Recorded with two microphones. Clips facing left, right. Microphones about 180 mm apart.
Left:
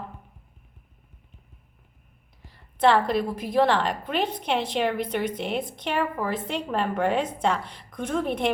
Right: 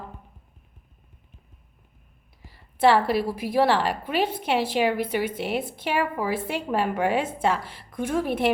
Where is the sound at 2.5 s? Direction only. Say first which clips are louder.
Right 1 dB; 5° right (ahead or behind).